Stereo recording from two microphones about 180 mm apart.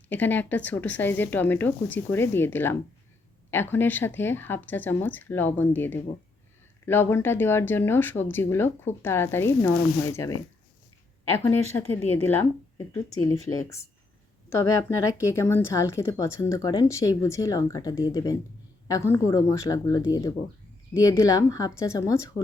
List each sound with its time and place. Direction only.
0.1 s speech: 10° left (ahead or behind)
11.3 s speech: 15° left (ahead or behind)